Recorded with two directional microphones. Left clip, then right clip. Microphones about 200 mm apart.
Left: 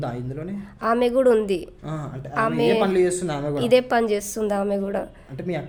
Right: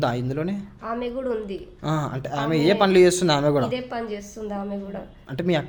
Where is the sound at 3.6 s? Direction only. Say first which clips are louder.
Left 10 dB; 60° left (ahead or behind).